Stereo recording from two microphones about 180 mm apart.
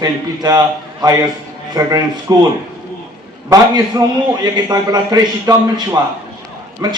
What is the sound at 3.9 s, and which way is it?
A man's voice, 20° right (ahead or behind).